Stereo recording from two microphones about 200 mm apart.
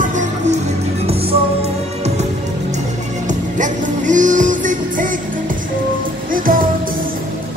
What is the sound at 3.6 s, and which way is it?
Music, 40° right (ahead or behind).